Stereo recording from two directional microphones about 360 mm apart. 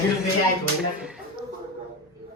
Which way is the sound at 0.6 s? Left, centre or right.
Centre.